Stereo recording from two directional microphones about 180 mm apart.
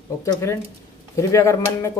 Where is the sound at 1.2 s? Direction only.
15° left (ahead or behind).